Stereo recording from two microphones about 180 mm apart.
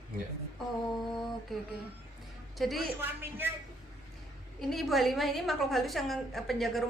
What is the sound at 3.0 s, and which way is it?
Speech, 10° right (ahead or behind).